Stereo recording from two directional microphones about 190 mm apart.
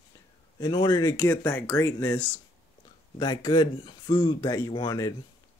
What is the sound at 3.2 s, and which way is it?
Speech, 20° left (ahead or behind).